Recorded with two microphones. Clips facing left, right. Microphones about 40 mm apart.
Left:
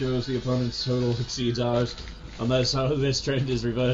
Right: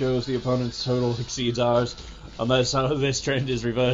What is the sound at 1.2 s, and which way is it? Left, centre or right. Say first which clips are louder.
Speech: right 3 dB; right.